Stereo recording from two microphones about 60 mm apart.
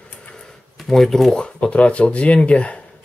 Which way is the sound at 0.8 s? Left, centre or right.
Centre.